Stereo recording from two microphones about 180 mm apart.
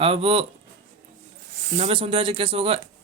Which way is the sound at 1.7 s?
35° right (ahead or behind).